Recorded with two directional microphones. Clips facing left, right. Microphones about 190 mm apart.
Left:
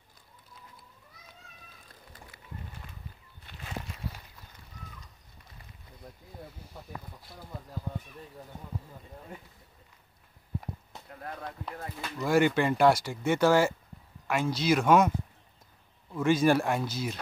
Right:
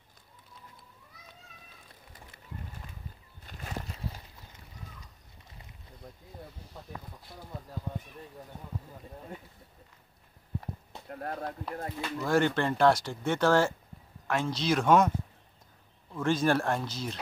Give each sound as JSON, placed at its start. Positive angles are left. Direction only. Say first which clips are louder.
{"t": 3.5, "sound": "a sound", "louder": "right 2 dB", "side_deg": -45}
{"t": 6.8, "sound": "speech", "louder": "even", "side_deg": 5}
{"t": 11.1, "sound": "speech", "louder": "right 4 dB", "side_deg": -45}
{"t": 12.2, "sound": "speech", "louder": "left 2 dB", "side_deg": 10}